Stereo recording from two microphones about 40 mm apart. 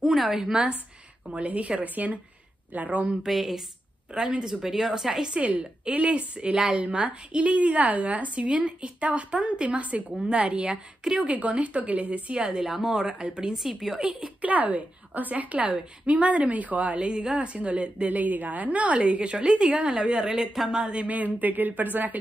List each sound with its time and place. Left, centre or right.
0.0 s speech: centre
1.3 s a woman's voice: right
3.3 s speech: centre
4.1 s a woman's voice: centre
5.3 s a woman's voice: right
6.5 s a woman's voice: centre
6.8 s a woman's voice: right
13.6 s a woman's voice: centre
14.4 s a woman's voice: right
17.0 s a woman's voice: right
21.1 s speech: right